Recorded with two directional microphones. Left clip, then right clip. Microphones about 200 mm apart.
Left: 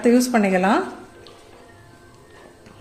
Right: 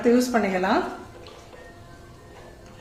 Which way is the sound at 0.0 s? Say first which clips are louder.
Left 3 dB; 45° left (ahead or behind).